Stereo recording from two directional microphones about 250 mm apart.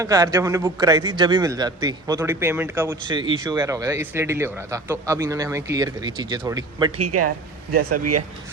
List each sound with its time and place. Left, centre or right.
0.0 s speech: centre
6.9 s speech: right
7.3 s speech: right
7.9 s speech: right